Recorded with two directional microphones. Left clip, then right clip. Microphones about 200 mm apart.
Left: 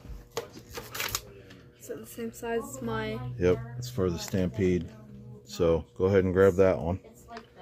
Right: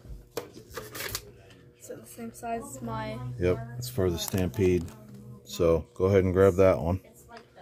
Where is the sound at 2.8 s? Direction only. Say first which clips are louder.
Left 2 dB; 55° left (ahead or behind).